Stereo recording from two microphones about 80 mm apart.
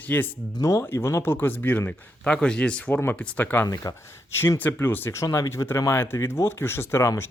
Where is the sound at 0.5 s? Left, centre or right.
Left.